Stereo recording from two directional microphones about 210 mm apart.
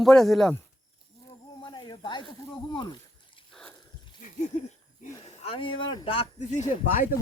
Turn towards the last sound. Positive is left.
turn(degrees=35)  # may be behind; listen again after turning